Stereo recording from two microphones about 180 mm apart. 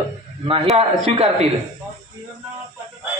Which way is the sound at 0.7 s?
35° right (ahead or behind).